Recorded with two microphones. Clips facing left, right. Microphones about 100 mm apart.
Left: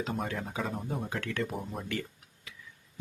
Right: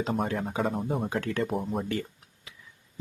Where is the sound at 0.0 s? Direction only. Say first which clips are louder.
Right 5 dB; 35° right (ahead or behind).